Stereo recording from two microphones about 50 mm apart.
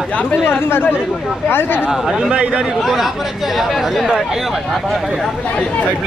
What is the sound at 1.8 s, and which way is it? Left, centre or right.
Speech, centre.